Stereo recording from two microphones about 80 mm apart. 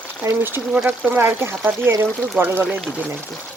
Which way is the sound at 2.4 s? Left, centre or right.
Right.